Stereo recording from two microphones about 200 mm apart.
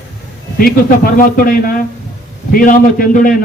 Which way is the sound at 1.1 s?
45° left (ahead or behind).